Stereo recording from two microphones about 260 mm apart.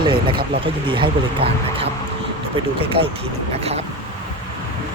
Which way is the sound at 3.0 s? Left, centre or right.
Right.